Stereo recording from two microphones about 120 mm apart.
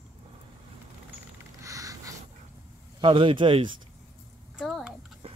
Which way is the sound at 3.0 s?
45° right (ahead or behind).